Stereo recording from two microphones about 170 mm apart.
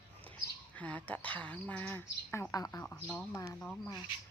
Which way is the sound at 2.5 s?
20° left (ahead or behind).